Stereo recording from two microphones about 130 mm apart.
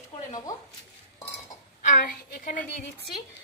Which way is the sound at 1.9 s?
85° left.